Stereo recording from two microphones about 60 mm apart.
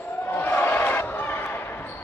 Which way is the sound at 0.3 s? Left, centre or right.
Left.